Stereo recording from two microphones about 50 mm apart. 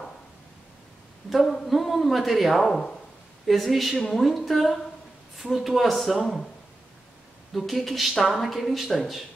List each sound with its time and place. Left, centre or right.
1.3 s speech: centre
2.6 s speech: centre
3.4 s speech: centre
7.5 s speech: centre